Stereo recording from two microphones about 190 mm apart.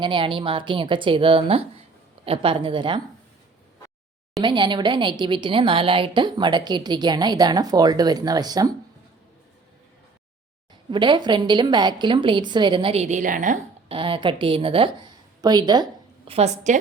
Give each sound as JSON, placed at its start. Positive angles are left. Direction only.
{"t": 0.0, "sound": "speech", "side_deg": -25}
{"t": 4.4, "sound": "speech", "side_deg": -25}
{"t": 10.9, "sound": "speech", "side_deg": -25}
{"t": 13.8, "sound": "a woman's voice", "side_deg": -30}